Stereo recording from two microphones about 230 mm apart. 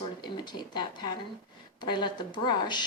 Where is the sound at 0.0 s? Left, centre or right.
Centre.